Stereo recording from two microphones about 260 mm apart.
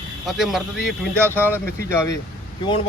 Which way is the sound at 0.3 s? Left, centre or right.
Centre.